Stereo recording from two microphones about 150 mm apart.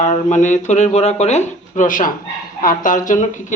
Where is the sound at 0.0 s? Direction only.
55° left (ahead or behind).